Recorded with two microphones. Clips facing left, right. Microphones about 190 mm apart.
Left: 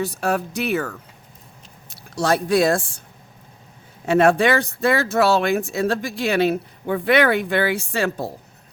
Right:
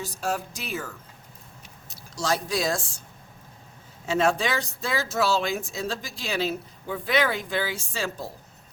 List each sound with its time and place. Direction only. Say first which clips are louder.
0.0 s speech: left 7 dB; 65° left (ahead or behind)
4.0 s speech: left 8 dB; 60° left (ahead or behind)